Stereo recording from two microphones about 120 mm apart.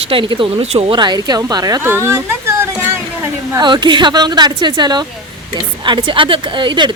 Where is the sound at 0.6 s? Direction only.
60° right (ahead or behind).